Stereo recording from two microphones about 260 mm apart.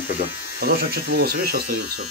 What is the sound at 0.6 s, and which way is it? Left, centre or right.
Speech, right.